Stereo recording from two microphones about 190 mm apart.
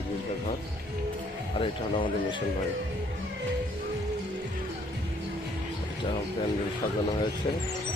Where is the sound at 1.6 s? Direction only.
25° left (ahead or behind).